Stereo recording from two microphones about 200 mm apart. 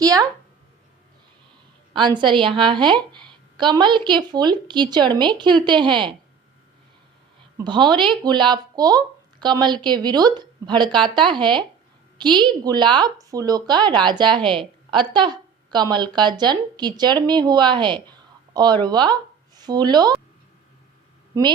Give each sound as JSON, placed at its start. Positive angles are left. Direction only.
{"t": 0.0, "sound": "speech", "side_deg": -20}
{"t": 1.9, "sound": "speech", "side_deg": -25}
{"t": 7.6, "sound": "speech", "side_deg": -20}